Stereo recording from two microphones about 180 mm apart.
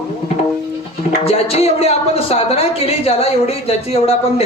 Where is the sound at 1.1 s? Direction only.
35° left (ahead or behind).